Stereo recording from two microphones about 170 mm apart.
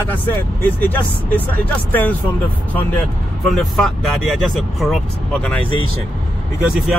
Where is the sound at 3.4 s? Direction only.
Centre (ahead or behind).